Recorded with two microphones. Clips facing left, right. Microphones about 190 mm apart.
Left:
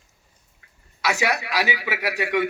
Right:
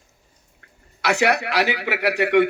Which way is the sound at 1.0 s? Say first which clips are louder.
Right 4 dB; 65° right (ahead or behind).